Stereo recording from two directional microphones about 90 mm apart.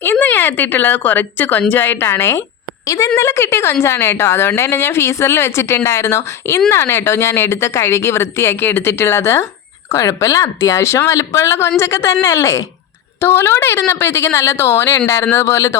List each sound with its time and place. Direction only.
0.0 s a woman's voice: 20° left (ahead or behind)
2.8 s a woman's voice: 40° left (ahead or behind)